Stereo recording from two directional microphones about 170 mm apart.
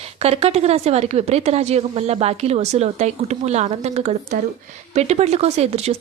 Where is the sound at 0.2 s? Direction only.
40° right (ahead or behind).